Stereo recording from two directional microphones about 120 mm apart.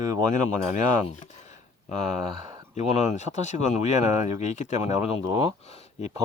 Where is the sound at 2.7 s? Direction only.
75° left (ahead or behind).